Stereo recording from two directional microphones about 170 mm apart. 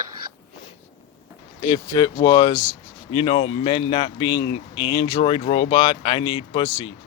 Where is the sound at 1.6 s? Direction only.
25° left (ahead or behind).